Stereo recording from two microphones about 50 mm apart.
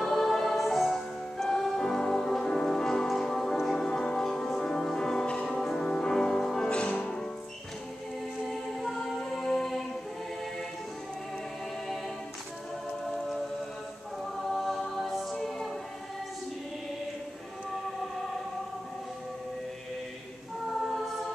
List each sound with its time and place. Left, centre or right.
0.0 s music: centre
6.7 s music: left
8.5 s music: centre
14.3 s music: centre
15.3 s choir: centre